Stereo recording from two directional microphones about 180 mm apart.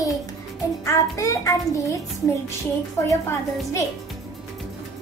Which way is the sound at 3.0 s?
15° left (ahead or behind).